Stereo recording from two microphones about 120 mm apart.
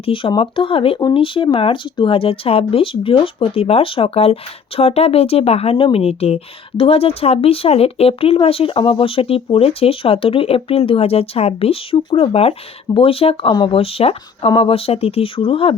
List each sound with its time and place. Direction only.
0.0 s speech: 45° left (ahead or behind)